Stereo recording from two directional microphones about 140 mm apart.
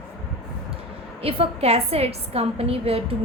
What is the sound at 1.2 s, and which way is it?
A woman's voice, 45° right (ahead or behind).